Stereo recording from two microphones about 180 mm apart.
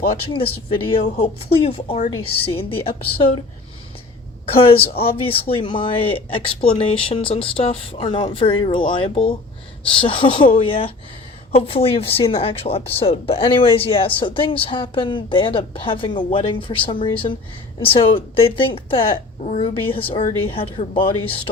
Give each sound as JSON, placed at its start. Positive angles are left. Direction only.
{"t": 0.0, "sound": "speech", "side_deg": 30}
{"t": 4.4, "sound": "speech", "side_deg": 30}
{"t": 19.4, "sound": "a woman's voice", "side_deg": 45}
{"t": 19.6, "sound": "speech", "side_deg": 30}